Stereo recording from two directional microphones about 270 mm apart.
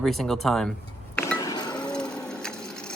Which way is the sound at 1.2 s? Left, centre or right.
Centre.